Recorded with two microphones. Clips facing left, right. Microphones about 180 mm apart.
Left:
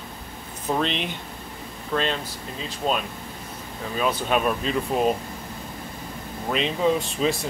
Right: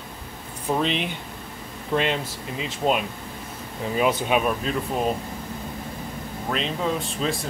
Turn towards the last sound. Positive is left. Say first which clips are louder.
# left 3 dB
turn(degrees=0)  # may be behind; listen again after turning